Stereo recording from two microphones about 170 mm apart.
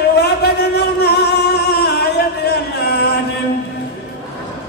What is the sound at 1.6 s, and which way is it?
Music, 70° left (ahead or behind).